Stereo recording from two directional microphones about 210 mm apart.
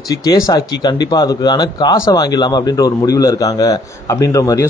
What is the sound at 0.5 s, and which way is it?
Speech, 15° left (ahead or behind).